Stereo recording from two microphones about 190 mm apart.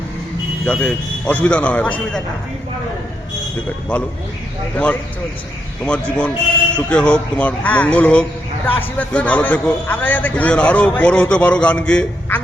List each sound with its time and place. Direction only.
0.6 s a man's voice: 5° left (ahead or behind)
3.9 s a man's voice: 5° left (ahead or behind)